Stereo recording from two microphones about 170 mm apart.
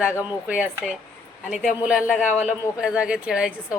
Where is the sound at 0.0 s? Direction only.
10° right (ahead or behind).